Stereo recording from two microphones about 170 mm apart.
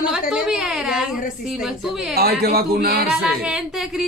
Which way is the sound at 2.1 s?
65° right (ahead or behind).